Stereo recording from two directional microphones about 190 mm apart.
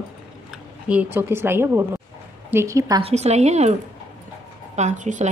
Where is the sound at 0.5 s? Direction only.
5° right (ahead or behind).